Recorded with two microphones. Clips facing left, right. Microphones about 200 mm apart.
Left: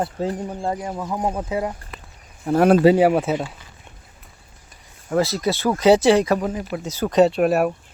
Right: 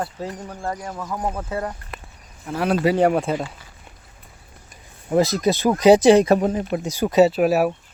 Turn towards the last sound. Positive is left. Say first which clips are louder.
# even
turn(degrees=0)  # may be behind; listen again after turning